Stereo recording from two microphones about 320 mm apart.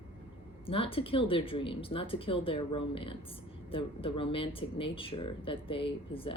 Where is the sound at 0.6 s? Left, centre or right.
Centre.